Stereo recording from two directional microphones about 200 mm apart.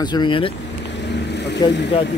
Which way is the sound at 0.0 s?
20° left (ahead or behind).